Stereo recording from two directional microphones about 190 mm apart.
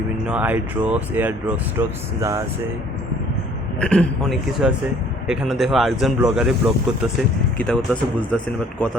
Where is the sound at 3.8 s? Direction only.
5° left (ahead or behind).